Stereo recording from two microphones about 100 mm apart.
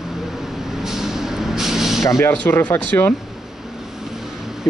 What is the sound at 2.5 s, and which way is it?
Speech, 20° left (ahead or behind).